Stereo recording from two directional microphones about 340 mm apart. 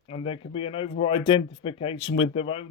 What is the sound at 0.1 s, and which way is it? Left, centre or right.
A man's voice, centre.